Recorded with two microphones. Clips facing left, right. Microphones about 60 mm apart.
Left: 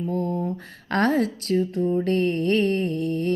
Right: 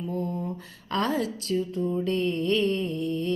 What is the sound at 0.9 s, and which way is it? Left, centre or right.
Speech, left.